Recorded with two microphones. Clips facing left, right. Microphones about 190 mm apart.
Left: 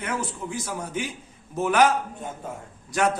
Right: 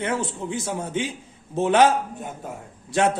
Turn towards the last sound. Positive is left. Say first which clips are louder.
# right 2 dB
turn(degrees=-25)  # may be behind; listen again after turning